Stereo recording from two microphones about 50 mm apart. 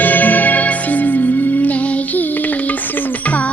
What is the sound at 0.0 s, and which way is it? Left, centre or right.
Music, left.